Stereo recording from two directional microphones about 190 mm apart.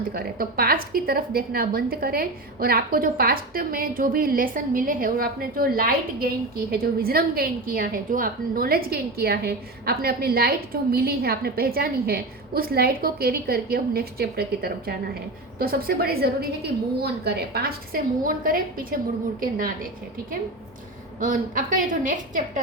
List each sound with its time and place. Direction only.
0.1 s a woman's voice: 50° right (ahead or behind)
21.2 s a woman's voice: 45° right (ahead or behind)